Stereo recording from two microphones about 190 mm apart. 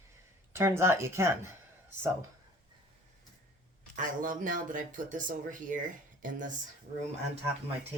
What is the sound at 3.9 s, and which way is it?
Speech, 45° right (ahead or behind).